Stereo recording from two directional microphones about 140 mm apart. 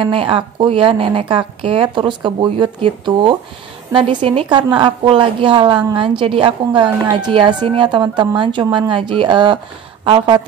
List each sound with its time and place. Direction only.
0.0 s a woman's voice: 40° right (ahead or behind)